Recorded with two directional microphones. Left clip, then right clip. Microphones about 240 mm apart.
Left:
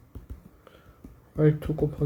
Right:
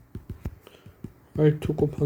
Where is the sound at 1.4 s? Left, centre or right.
Right.